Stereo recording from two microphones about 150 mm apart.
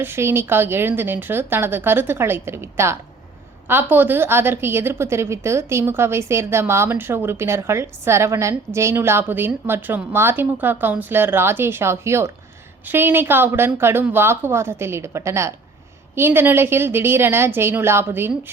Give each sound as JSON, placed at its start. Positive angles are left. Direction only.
{"t": 0.0, "sound": "a woman's voice", "side_deg": -15}